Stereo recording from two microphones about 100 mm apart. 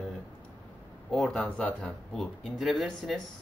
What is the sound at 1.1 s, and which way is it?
Speech, 5° left (ahead or behind).